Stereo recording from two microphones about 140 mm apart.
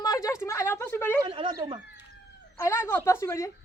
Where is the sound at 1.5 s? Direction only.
30° right (ahead or behind).